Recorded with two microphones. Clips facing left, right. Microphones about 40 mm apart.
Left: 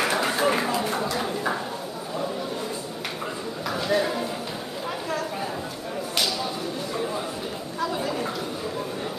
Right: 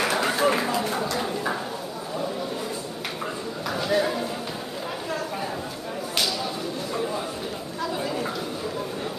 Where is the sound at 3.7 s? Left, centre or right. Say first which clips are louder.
Even; centre.